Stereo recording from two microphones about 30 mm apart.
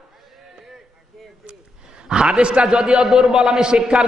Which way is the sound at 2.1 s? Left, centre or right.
Right.